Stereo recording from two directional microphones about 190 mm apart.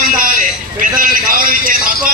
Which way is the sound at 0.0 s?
45° right (ahead or behind).